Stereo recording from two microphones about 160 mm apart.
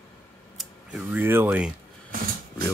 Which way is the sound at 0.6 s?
5° right (ahead or behind).